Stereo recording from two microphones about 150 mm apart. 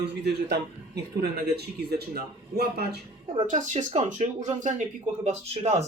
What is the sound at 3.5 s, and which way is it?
Speech, 55° right (ahead or behind).